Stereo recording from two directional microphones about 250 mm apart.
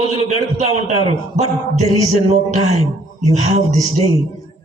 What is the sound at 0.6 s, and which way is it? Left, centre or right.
Speech, left.